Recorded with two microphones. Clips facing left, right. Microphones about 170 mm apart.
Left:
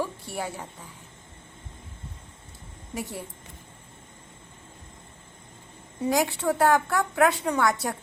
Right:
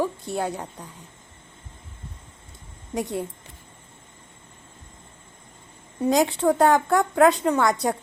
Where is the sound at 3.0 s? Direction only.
20° right (ahead or behind).